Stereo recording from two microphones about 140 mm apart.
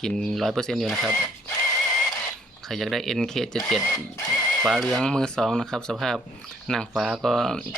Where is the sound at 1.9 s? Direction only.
5° left (ahead or behind).